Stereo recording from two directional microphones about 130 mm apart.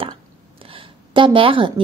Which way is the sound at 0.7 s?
40° right (ahead or behind).